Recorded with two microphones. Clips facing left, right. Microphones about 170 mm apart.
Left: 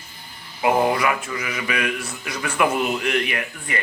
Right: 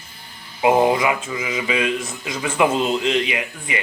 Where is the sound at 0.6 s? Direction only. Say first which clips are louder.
Right 3 dB; 20° right (ahead or behind).